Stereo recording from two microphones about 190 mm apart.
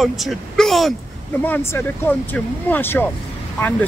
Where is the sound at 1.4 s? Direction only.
10° left (ahead or behind).